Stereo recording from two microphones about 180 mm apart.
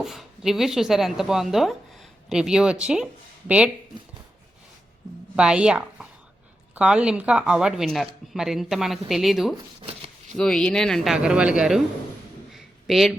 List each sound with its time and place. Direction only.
0.0 s speech: centre (ahead or behind)
5.4 s speech: 5° right (ahead or behind)
9.8 s shuffling cards: 35° right (ahead or behind)
10.3 s speech: 5° left (ahead or behind)
12.5 s a sound: centre (ahead or behind)